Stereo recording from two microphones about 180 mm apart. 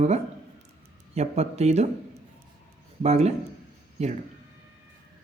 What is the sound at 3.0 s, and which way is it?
Speech, 35° right (ahead or behind).